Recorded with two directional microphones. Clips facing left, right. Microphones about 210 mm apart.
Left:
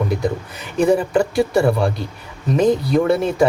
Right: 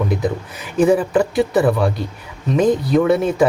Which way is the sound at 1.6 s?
30° left (ahead or behind).